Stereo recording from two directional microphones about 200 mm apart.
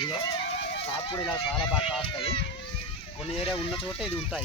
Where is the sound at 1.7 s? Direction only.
Centre (ahead or behind).